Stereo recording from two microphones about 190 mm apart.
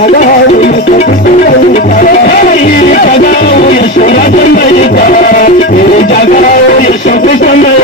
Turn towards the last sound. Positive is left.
turn(degrees=45)  # may be behind; listen again after turning